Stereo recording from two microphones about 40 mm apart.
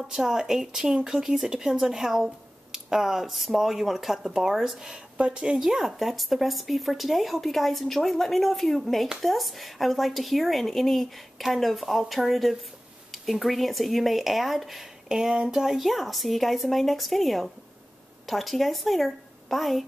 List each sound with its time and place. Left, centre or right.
0.1 s speech: centre
5.1 s a woman's voice: right
5.6 s speech: centre
15.0 s a woman's voice: centre